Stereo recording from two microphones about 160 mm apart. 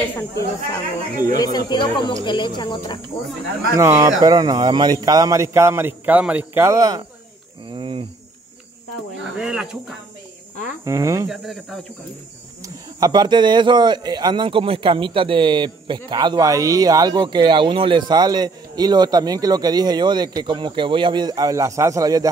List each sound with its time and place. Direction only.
1.3 s speech: 25° left (ahead or behind)
3.7 s speech: 20° right (ahead or behind)
7.7 s speech: 30° right (ahead or behind)
9.4 s speech: 5° right (ahead or behind)
10.9 s speech: 20° right (ahead or behind)
11.2 s speech: 5° right (ahead or behind)
12.6 s speech: 25° right (ahead or behind)